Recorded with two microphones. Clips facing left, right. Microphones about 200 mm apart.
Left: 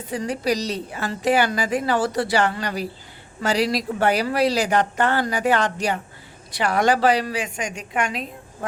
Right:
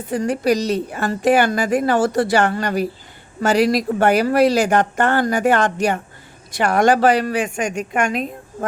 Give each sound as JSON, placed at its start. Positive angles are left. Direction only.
{"t": 0.1, "sound": "a woman's voice", "side_deg": -50}